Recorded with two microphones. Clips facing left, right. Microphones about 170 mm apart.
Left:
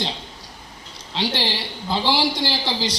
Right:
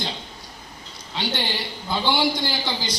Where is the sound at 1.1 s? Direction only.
30° left (ahead or behind).